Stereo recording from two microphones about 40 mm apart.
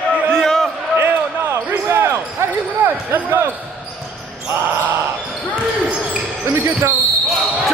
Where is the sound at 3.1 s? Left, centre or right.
Right.